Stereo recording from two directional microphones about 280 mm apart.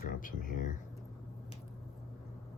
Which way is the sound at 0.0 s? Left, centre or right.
Left.